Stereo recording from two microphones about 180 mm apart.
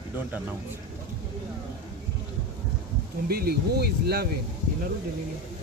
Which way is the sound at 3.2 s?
60° right (ahead or behind).